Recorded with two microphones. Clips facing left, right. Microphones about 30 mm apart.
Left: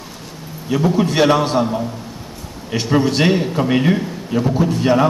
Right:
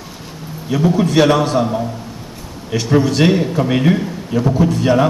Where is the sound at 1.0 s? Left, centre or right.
Centre.